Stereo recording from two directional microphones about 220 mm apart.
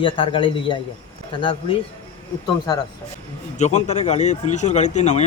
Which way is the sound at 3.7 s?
30° left (ahead or behind).